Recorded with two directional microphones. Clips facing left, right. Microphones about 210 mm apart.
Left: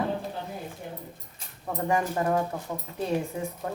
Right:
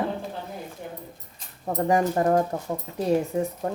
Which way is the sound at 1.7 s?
40° right (ahead or behind).